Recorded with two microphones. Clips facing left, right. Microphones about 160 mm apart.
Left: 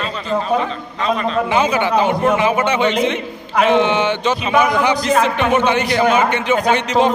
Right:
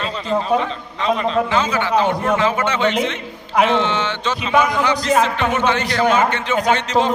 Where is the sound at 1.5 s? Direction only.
15° left (ahead or behind).